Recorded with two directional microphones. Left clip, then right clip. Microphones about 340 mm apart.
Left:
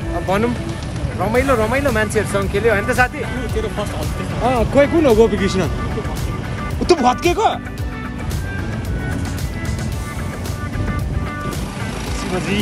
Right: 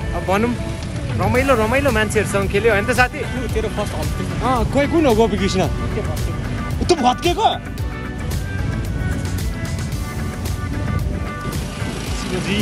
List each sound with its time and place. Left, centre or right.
1.2 s speech: centre
7.0 s speech: centre